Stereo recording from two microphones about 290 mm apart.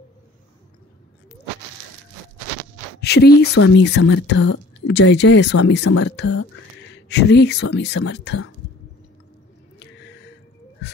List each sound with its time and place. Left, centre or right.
3.0 s speech: left
9.8 s gasp: left